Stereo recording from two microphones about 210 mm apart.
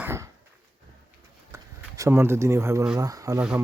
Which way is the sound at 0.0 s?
10° right (ahead or behind).